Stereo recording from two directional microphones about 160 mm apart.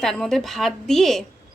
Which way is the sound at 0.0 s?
Centre (ahead or behind).